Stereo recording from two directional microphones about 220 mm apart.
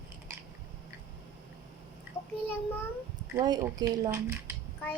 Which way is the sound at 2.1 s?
10° right (ahead or behind).